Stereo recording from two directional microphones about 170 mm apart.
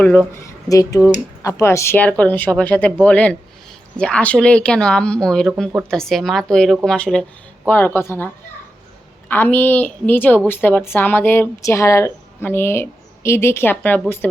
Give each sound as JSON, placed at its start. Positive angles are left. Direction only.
{"t": 0.0, "sound": "a woman's voice", "side_deg": 10}
{"t": 9.3, "sound": "a woman's voice", "side_deg": 10}